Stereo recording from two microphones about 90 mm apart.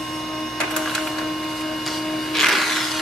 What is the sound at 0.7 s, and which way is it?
Printer, centre (ahead or behind).